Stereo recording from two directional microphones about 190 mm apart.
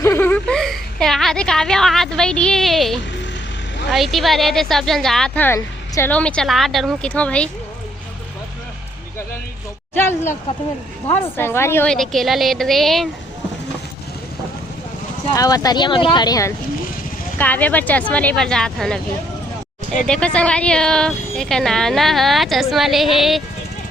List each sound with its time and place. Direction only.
0.0 s a sound: 15° left (ahead or behind)
3.8 s a woman's voice: centre (ahead or behind)
9.9 s a woman's voice: 10° left (ahead or behind)
15.4 s speech: 20° left (ahead or behind)
17.3 s a woman's voice: 10° left (ahead or behind)
20.1 s a woman's voice: 5° left (ahead or behind)